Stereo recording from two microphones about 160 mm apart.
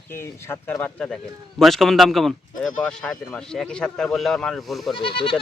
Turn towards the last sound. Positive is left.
turn(degrees=35)  # may be behind; listen again after turning